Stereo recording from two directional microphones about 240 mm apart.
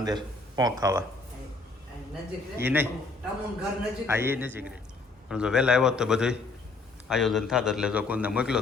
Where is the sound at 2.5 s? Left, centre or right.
Centre.